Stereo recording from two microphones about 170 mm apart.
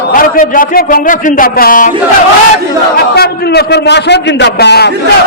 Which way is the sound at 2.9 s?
70° left (ahead or behind).